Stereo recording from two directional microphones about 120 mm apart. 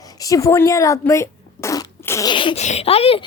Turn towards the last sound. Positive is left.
turn(degrees=55)  # may be behind; listen again after turning